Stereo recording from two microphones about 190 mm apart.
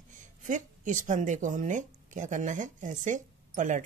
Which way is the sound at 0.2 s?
40° right (ahead or behind).